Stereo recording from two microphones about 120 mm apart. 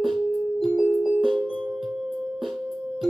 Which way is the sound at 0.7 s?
15° right (ahead or behind).